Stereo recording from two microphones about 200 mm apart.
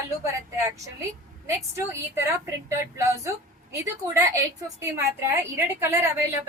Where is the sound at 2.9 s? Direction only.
15° right (ahead or behind).